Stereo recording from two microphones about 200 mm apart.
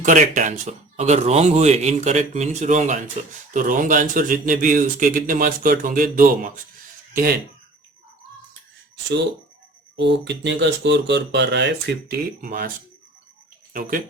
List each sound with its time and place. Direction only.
0.0 s speech: 40° right (ahead or behind)
9.9 s speech: 60° right (ahead or behind); by 12.7 s 45° right (ahead or behind)